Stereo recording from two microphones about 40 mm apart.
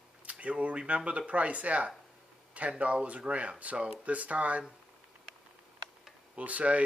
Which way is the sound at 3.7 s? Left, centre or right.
Right.